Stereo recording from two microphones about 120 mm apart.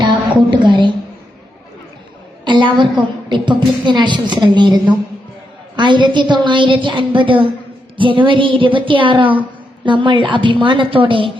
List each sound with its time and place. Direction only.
0.0 s a woman's voice: 40° right (ahead or behind)
2.4 s a sound: 40° right (ahead or behind)
3.2 s a woman's voice: 40° right (ahead or behind)